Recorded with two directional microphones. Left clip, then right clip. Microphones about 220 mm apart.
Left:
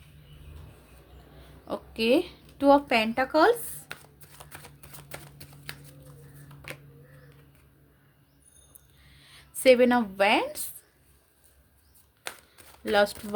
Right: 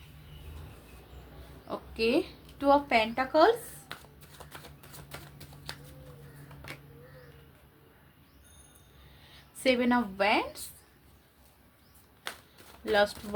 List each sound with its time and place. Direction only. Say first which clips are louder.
1.6 s speech: left 3 dB; 50° left (ahead or behind)
5.0 s a sound: left 3 dB; 30° left (ahead or behind)
9.3 s speech: left 8 dB; 50° left (ahead or behind)
12.9 s speech: left 3 dB; 50° left (ahead or behind)